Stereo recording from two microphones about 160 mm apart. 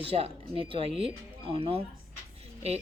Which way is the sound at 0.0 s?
35° right (ahead or behind).